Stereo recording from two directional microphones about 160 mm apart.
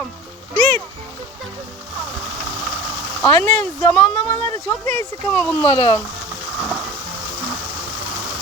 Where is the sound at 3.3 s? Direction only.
35° right (ahead or behind).